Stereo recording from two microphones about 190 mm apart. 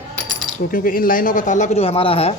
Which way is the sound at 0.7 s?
45° left (ahead or behind).